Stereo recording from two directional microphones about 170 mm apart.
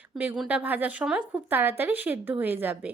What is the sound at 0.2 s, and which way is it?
Speech, 10° right (ahead or behind).